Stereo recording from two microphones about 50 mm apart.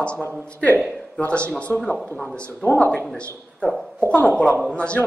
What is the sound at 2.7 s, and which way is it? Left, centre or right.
Speech, left.